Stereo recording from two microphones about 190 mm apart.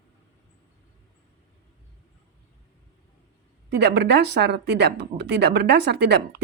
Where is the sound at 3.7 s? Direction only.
60° right (ahead or behind).